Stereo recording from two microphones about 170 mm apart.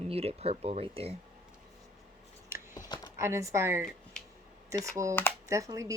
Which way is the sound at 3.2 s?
15° right (ahead or behind).